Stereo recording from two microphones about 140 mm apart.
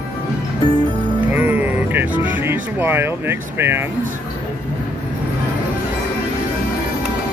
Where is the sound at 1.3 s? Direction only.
15° right (ahead or behind).